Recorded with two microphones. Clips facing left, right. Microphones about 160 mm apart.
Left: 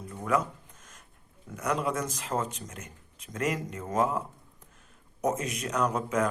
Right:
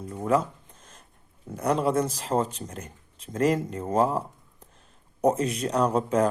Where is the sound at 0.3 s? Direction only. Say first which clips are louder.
Right 4 dB; 30° right (ahead or behind).